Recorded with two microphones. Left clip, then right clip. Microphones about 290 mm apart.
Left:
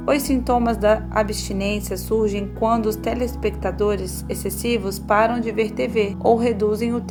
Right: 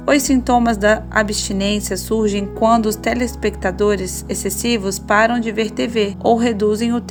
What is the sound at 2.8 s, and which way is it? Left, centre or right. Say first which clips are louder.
Speech: right 3 dB; right.